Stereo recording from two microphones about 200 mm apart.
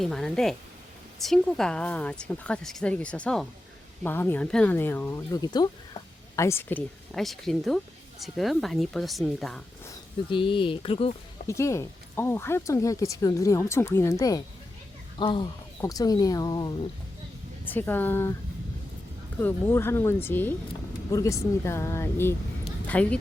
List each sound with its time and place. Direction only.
0.0 s speech: centre (ahead or behind)
9.8 s speech: 20° left (ahead or behind)
11.4 s speech: 15° left (ahead or behind)
17.7 s speech: 10° left (ahead or behind)
19.4 s speech: 10° left (ahead or behind)